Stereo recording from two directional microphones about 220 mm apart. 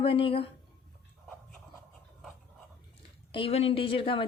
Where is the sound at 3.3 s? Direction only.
25° left (ahead or behind).